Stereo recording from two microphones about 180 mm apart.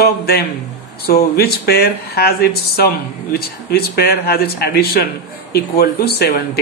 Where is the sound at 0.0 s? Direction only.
60° left (ahead or behind).